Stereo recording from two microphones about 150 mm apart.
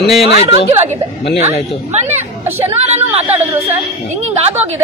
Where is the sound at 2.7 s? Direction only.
45° right (ahead or behind).